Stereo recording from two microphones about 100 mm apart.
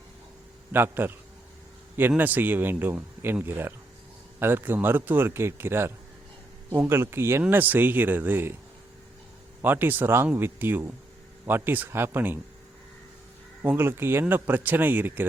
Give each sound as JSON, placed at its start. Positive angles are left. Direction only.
{"t": 0.7, "sound": "a man's voice", "side_deg": -20}
{"t": 9.6, "sound": "a man's voice", "side_deg": -20}
{"t": 13.6, "sound": "a man's voice", "side_deg": -20}